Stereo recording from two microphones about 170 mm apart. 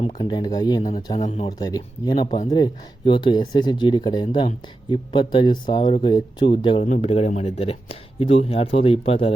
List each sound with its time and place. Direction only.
0.2 s speech: 25° left (ahead or behind)
6.8 s speech: 40° left (ahead or behind)